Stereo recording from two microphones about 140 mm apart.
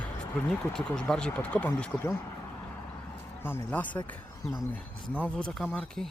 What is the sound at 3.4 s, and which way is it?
Speech, 15° left (ahead or behind).